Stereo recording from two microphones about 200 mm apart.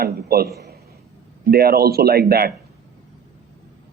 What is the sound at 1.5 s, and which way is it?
Speech, 50° right (ahead or behind).